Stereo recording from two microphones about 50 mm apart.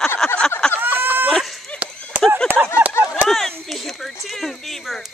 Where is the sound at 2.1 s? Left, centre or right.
Right.